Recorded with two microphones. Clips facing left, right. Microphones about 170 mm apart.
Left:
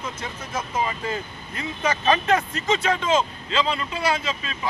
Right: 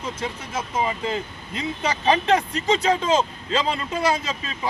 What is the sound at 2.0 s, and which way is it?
Speech, 30° right (ahead or behind).